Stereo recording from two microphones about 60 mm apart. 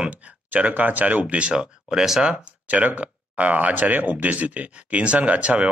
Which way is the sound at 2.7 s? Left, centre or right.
Right.